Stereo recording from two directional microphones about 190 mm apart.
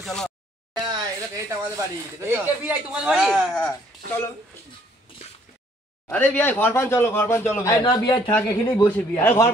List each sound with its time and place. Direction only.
0.0 s a sound: 5° left (ahead or behind)
0.8 s speech: 15° right (ahead or behind); by 4.2 s 5° left (ahead or behind)
6.0 s speech: 10° left (ahead or behind)